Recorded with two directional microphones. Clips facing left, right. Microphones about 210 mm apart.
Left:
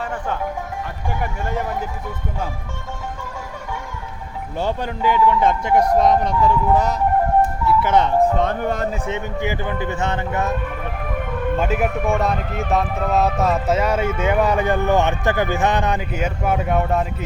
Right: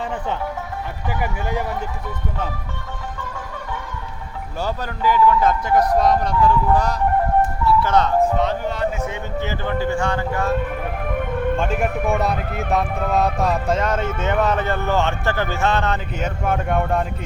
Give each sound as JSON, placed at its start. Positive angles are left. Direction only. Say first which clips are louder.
{"t": 1.0, "sound": "speech", "louder": "right 1 dB", "side_deg": -5}
{"t": 4.6, "sound": "speech", "louder": "left 1 dB", "side_deg": 25}
{"t": 8.4, "sound": "speech", "louder": "left 1 dB", "side_deg": 50}
{"t": 9.0, "sound": "speech", "louder": "left 1 dB", "side_deg": 25}
{"t": 9.4, "sound": "speech", "louder": "right 4 dB", "side_deg": 15}
{"t": 11.5, "sound": "speech", "louder": "left 1 dB", "side_deg": 5}